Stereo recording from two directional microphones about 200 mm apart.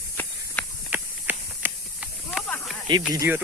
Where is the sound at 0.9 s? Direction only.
10° right (ahead or behind).